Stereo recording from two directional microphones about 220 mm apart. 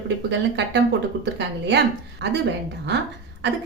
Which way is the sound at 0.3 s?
50° right (ahead or behind).